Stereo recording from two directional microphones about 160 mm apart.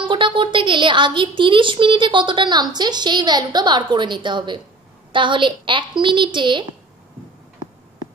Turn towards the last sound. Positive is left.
turn(degrees=-30)  # may be behind; listen again after turning